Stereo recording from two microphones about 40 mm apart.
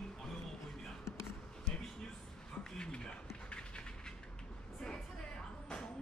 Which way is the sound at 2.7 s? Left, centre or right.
Left.